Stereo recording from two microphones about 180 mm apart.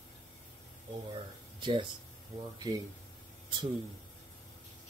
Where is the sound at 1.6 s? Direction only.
25° right (ahead or behind).